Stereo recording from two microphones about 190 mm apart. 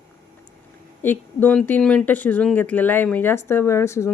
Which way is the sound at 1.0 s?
10° left (ahead or behind).